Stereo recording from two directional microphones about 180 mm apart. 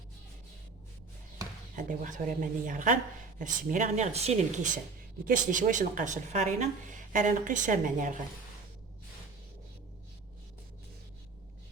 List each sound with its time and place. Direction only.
1.7 s speech: 45° right (ahead or behind)